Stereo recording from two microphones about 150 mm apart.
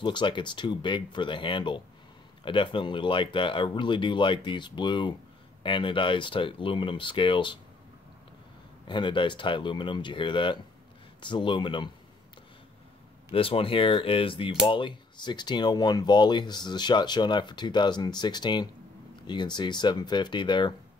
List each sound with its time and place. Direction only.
0.0 s speech: 30° left (ahead or behind)
8.8 s speech: 30° left (ahead or behind)
13.3 s speech: 35° left (ahead or behind)